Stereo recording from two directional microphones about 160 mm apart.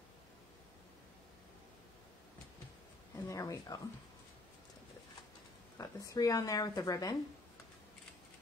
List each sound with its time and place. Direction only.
3.3 s speech: 20° left (ahead or behind)
5.8 s speech: 20° left (ahead or behind)